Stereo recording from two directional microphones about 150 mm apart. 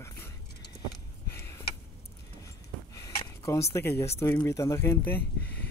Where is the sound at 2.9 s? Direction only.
25° left (ahead or behind).